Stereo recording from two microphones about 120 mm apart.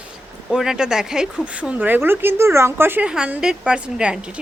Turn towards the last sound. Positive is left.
turn(degrees=-10)  # may be behind; listen again after turning